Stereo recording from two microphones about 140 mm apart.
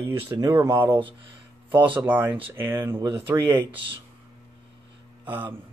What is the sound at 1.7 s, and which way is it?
Speech, 35° right (ahead or behind).